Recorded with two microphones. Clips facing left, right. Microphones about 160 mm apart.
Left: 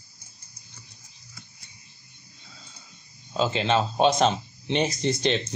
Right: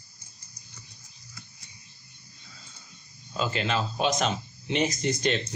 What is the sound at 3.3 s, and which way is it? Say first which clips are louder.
Speech: left 5 dB; 25° left (ahead or behind).